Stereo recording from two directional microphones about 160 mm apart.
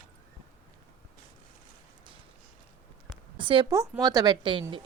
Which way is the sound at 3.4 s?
30° right (ahead or behind).